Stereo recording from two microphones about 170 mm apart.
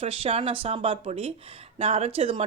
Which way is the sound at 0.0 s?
35° right (ahead or behind).